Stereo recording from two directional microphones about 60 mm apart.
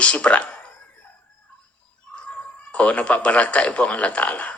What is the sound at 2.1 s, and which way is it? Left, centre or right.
A man's voice, centre.